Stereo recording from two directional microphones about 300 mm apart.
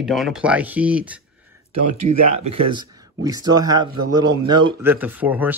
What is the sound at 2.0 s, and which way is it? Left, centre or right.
A man's voice, right.